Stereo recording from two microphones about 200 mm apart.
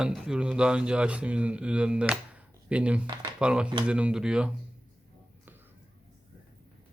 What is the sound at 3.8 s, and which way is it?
Speech, 5° right (ahead or behind).